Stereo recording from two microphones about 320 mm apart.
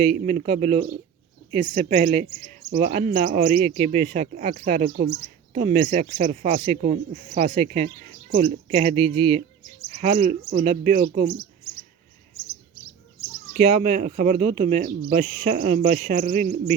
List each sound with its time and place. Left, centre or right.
0.3 s speech: right
13.5 s speech: right